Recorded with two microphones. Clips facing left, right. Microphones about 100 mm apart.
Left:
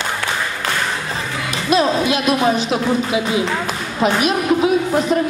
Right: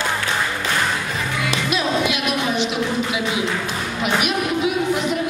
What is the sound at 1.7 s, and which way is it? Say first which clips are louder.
Speech: left 7 dB; 35° left (ahead or behind).